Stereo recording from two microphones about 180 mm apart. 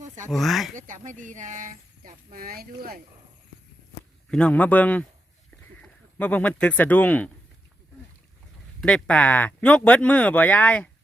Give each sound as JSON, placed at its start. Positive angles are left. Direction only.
{"t": 0.3, "sound": "speech", "side_deg": 0}
{"t": 0.8, "sound": "speech", "side_deg": -45}
{"t": 4.3, "sound": "speech", "side_deg": 5}
{"t": 8.8, "sound": "speech", "side_deg": 5}